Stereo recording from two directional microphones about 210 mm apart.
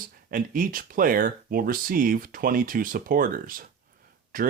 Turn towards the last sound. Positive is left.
turn(degrees=-40)  # may be behind; listen again after turning